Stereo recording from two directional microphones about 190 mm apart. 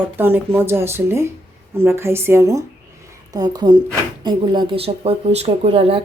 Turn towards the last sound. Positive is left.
turn(degrees=-30)  # may be behind; listen again after turning